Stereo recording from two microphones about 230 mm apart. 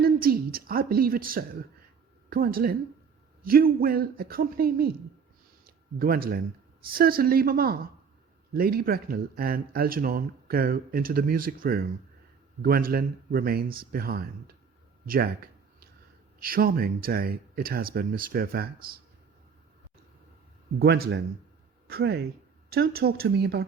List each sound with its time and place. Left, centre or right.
0.0 s a woman's voice: right
15.0 s a sound: right
16.4 s speech: right
20.7 s speech: right